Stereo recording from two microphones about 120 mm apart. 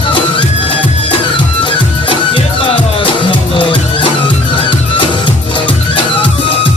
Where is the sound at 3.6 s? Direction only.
45° left (ahead or behind).